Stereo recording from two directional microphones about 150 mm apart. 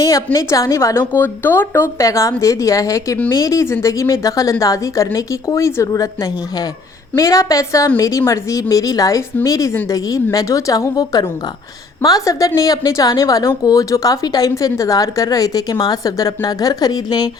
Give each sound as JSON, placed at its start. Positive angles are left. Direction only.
{"t": 0.3, "sound": "a woman's voice", "side_deg": 20}
{"t": 7.2, "sound": "a woman's voice", "side_deg": 20}